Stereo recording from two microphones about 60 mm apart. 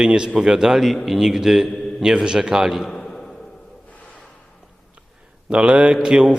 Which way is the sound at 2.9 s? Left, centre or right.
Centre.